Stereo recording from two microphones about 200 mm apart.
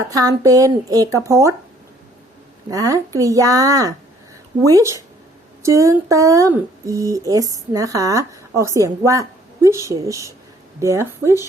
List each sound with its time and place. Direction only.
0.1 s speech: 15° right (ahead or behind)
2.6 s speech: 15° right (ahead or behind)